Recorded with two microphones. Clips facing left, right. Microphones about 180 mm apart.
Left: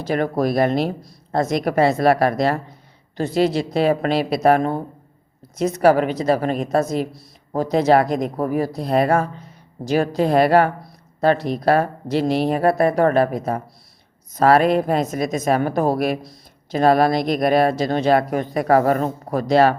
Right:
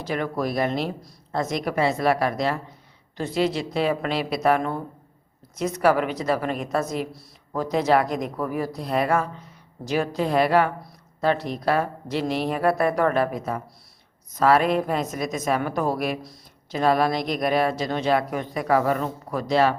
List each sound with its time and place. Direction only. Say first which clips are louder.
0.0 s speech: left 6 dB; 40° left (ahead or behind)
3.2 s speech: left 5 dB; 35° left (ahead or behind)